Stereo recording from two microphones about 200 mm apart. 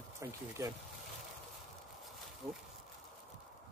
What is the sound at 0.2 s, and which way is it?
Speech, 15° right (ahead or behind).